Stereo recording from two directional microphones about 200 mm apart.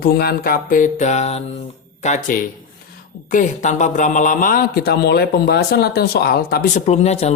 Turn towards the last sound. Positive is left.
turn(degrees=35)  # may be behind; listen again after turning